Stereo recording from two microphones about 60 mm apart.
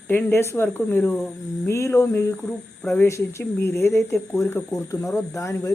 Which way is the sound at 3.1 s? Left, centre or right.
Left.